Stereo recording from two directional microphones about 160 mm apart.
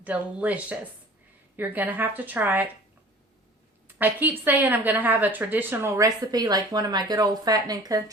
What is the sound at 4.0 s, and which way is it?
A woman's voice, 10° right (ahead or behind).